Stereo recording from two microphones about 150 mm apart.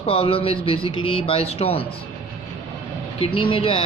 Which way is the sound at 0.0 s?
40° left (ahead or behind).